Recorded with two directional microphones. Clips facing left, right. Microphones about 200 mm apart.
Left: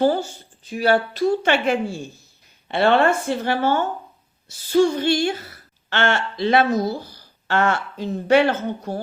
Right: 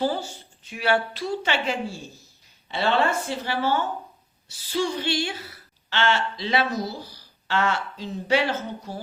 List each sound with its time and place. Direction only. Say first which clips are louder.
0.0 s speech: left 7 dB; 50° left (ahead or behind)
0.7 s a woman's voice: left 5 dB; 40° left (ahead or behind); by 9.0 s 55° left (ahead or behind)